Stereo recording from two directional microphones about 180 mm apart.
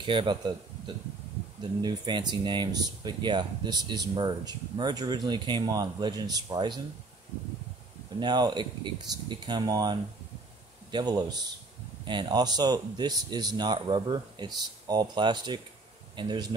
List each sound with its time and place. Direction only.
0.0 s speech: 30° right (ahead or behind)
1.6 s speech: 25° right (ahead or behind)
8.2 s speech: 25° right (ahead or behind)